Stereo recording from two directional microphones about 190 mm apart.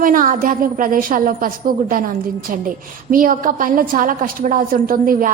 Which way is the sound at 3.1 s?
45° right (ahead or behind).